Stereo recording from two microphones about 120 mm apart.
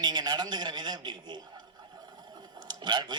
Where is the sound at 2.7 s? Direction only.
40° right (ahead or behind).